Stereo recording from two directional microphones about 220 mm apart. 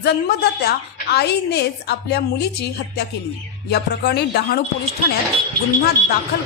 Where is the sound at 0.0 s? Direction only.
45° left (ahead or behind).